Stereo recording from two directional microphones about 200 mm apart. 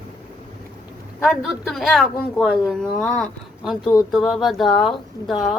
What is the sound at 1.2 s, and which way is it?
A woman's voice, centre (ahead or behind).